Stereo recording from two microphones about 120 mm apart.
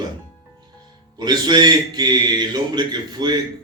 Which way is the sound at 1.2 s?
35° right (ahead or behind).